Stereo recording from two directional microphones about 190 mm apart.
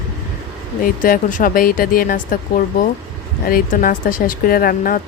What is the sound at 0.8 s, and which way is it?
A woman's voice, 45° left (ahead or behind).